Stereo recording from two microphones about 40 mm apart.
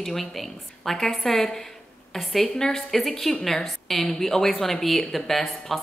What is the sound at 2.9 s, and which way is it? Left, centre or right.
A woman's voice, centre.